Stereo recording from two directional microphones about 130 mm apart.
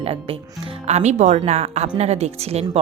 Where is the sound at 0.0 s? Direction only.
45° right (ahead or behind).